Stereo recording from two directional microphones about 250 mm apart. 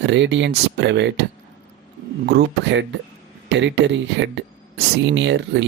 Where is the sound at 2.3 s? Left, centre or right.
Right.